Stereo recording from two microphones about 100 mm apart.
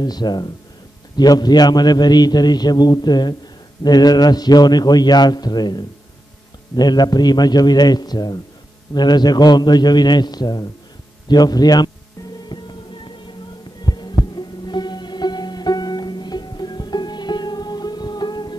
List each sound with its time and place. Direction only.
0.0 s a man's voice: 45° left (ahead or behind)
12.4 s music: 50° left (ahead or behind)